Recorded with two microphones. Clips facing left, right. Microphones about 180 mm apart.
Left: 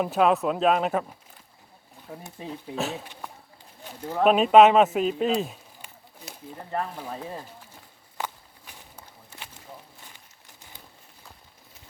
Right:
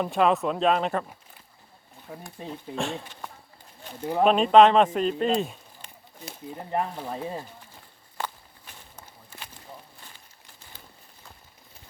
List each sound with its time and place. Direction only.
0.0 s speech: 5° left (ahead or behind)
2.4 s speech: 5° left (ahead or behind)
4.2 s speech: 5° left (ahead or behind)
6.6 s speech: 15° right (ahead or behind)
8.2 s walk: 10° left (ahead or behind)
9.3 s walk: 20° left (ahead or behind)